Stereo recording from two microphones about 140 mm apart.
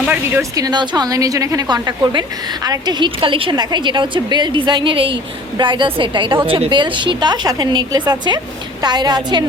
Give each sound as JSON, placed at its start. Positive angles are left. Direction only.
{"t": 0.0, "sound": "speech", "side_deg": -10}
{"t": 0.5, "sound": "a woman's voice", "side_deg": -30}